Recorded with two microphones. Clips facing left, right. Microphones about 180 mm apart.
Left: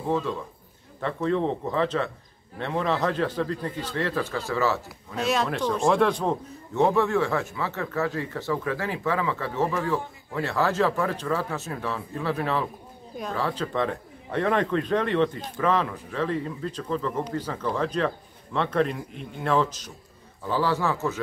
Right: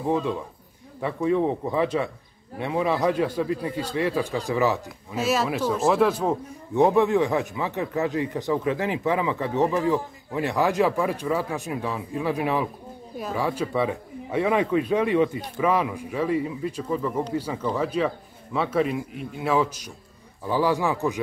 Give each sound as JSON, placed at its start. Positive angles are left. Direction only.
{"t": 0.1, "sound": "speech", "side_deg": -15}
{"t": 4.8, "sound": "speech", "side_deg": -5}